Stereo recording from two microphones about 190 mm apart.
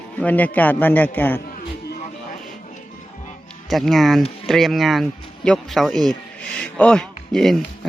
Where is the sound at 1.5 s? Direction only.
45° left (ahead or behind).